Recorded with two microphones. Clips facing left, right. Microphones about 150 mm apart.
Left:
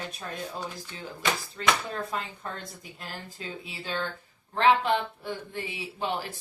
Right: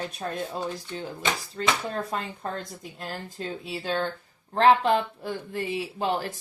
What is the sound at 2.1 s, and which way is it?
Speech, 35° right (ahead or behind).